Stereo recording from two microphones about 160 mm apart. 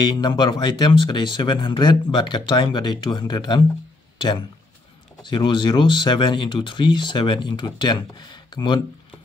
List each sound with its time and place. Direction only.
0.0 s speech: 30° left (ahead or behind)